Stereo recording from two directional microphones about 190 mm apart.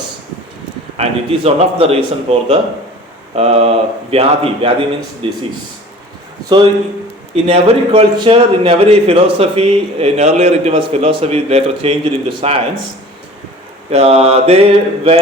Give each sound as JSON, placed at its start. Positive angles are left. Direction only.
{"t": 0.9, "sound": "a man's voice", "side_deg": -30}
{"t": 7.4, "sound": "a man's voice", "side_deg": -30}
{"t": 13.9, "sound": "a man's voice", "side_deg": -35}